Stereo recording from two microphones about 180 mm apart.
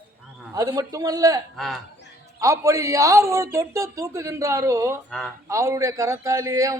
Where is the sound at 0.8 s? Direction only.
20° right (ahead or behind).